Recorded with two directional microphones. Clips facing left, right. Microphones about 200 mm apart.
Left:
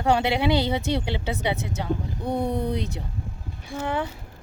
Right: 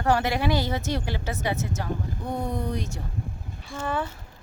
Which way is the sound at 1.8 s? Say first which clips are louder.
Left 4 dB; 20° left (ahead or behind).